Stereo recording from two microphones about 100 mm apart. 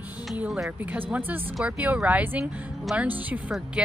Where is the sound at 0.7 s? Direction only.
15° right (ahead or behind).